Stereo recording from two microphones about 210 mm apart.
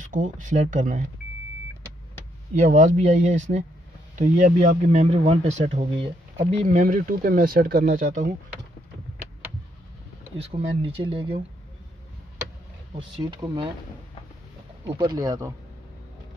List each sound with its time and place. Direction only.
0.0 s speech: 35° right (ahead or behind)
2.5 s speech: 35° right (ahead or behind)
10.4 s speech: 25° right (ahead or behind)
12.9 s speech: 20° right (ahead or behind)
14.9 s speech: 20° right (ahead or behind)